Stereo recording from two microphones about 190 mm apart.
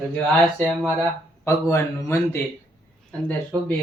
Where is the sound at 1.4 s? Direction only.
15° left (ahead or behind).